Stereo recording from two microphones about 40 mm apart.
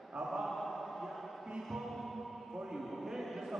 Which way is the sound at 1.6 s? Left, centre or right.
Centre.